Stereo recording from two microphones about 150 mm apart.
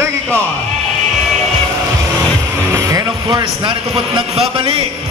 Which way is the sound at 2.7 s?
20° right (ahead or behind).